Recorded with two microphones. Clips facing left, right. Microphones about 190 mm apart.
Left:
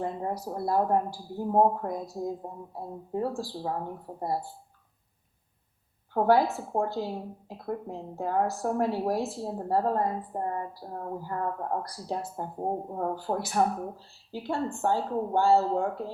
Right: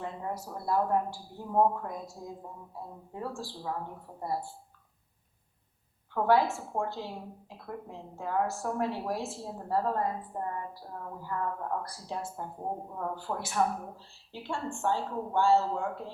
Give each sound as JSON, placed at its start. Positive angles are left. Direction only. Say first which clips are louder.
{"t": 0.0, "sound": "speech", "louder": "left 5 dB", "side_deg": 35}
{"t": 6.1, "sound": "speech", "louder": "left 3 dB", "side_deg": 40}